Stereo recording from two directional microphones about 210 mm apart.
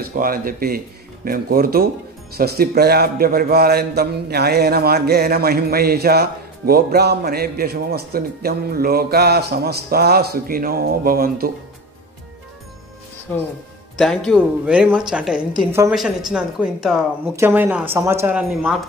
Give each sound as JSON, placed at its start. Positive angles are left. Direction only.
{"t": 0.0, "sound": "a man's voice", "side_deg": -45}
{"t": 13.3, "sound": "speech", "side_deg": 10}
{"t": 15.5, "sound": "speech", "side_deg": -15}
{"t": 16.3, "sound": "speech", "side_deg": -5}